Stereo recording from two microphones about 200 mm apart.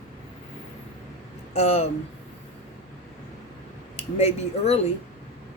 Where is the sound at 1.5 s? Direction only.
30° left (ahead or behind).